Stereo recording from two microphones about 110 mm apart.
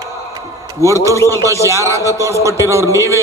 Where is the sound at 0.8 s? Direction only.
25° right (ahead or behind).